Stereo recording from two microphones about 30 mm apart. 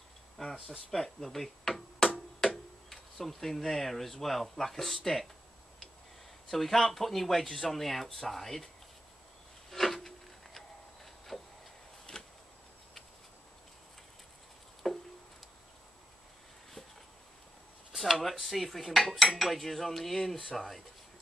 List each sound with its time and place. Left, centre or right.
0.4 s speech: centre
6.5 s speech: centre
7.5 s cutlery: centre
8.3 s speech: centre
9.7 s wood: centre
11.3 s a sound: centre
12.1 s a sound: left
14.8 s a sound: left
17.9 s dishes: centre
19.3 s cutlery: centre